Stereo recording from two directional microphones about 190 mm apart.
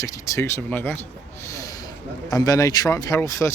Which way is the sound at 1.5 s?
15° left (ahead or behind).